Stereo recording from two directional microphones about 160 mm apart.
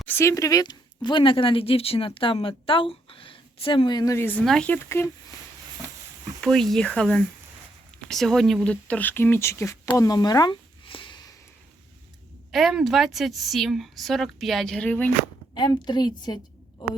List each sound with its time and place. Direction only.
0.0 s speech: 15° left (ahead or behind)
4.4 s speech: 5° left (ahead or behind)
6.4 s a woman's voice: centre (ahead or behind); by 9.9 s 20° left (ahead or behind)
9.9 s a sound: 25° left (ahead or behind)
12.5 s a woman's voice: centre (ahead or behind)
15.5 s a woman's voice: 25° left (ahead or behind)